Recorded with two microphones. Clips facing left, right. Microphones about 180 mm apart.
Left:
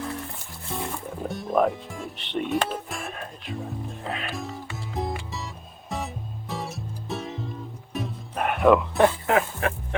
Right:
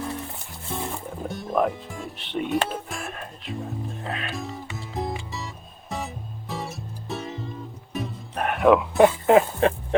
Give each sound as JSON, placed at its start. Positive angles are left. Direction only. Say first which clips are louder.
{"t": 0.7, "sound": "music", "louder": "right 1 dB", "side_deg": 0}
{"t": 1.3, "sound": "speech", "louder": "left 1 dB", "side_deg": 0}
{"t": 5.9, "sound": "music", "louder": "even", "side_deg": 0}
{"t": 9.0, "sound": "speech", "louder": "right 4 dB", "side_deg": -20}